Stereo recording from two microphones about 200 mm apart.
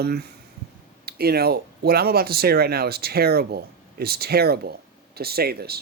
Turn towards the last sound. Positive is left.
turn(degrees=-50)  # may be behind; listen again after turning